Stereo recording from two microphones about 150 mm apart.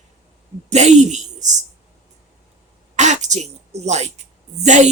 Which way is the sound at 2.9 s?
50° right (ahead or behind).